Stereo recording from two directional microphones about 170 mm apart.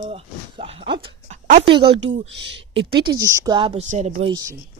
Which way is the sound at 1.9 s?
90° right.